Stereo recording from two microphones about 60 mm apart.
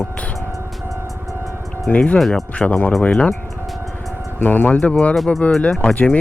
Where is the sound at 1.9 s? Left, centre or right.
Left.